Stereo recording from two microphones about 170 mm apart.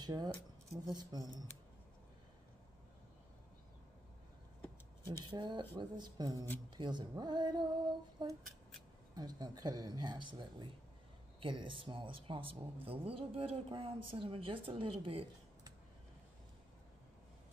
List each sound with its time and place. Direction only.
0.0 s speech: 25° right (ahead or behind)
5.3 s speech: 30° right (ahead or behind)